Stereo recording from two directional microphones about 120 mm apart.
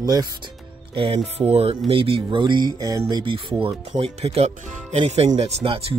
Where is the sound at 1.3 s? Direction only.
55° right (ahead or behind); by 3.0 s 35° right (ahead or behind).